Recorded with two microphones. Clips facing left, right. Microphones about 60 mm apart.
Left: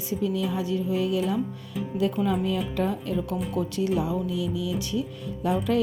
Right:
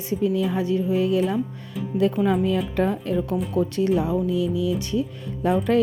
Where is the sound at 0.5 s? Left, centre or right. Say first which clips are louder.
Right 4 dB; right.